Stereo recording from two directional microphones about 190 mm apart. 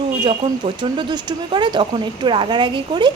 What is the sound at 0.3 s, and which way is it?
Speech, 25° right (ahead or behind).